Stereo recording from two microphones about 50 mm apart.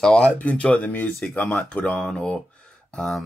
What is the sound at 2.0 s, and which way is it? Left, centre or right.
Speech, centre.